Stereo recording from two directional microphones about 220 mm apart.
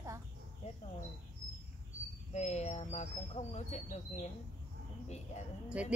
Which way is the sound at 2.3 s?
30° left (ahead or behind).